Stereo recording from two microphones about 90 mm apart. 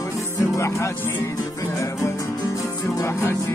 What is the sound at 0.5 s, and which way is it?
Music, 35° left (ahead or behind).